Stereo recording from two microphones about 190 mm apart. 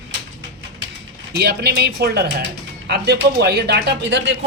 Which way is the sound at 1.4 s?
60° right (ahead or behind).